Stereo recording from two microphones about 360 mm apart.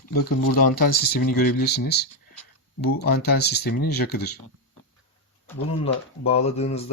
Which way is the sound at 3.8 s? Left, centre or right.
Left.